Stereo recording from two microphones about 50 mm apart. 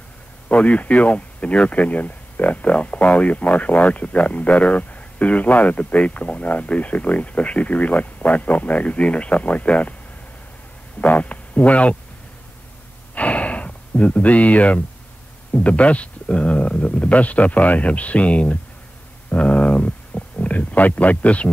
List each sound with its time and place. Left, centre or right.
0.5 s speech: left
11.0 s speech: left
13.1 s a sound: left
15.5 s speech: left